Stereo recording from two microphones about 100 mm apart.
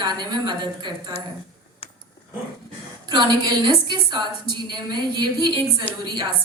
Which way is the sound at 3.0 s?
50° right (ahead or behind).